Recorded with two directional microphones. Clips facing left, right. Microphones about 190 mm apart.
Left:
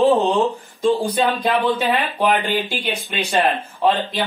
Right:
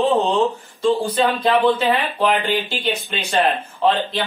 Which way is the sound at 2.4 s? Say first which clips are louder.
Right 1 dB; 15° left (ahead or behind).